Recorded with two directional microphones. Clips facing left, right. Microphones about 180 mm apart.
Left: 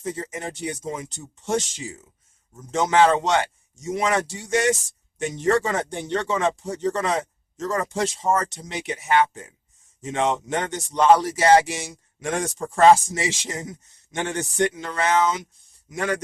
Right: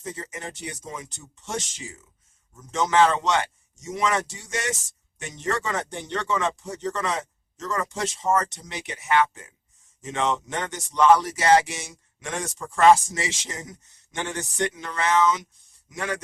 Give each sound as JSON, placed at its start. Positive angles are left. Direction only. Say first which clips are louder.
{"t": 0.0, "sound": "speech", "louder": "left 5 dB", "side_deg": 30}